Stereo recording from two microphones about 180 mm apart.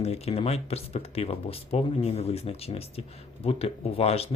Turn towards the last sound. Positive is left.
turn(degrees=35)  # may be behind; listen again after turning